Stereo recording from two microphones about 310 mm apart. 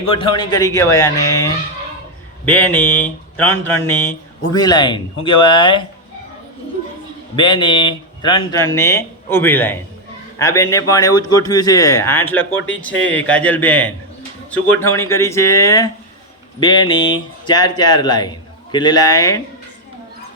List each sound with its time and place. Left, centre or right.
0.1 s speech: centre
7.3 s speech: centre
12.5 s speech: left
12.8 s speech: centre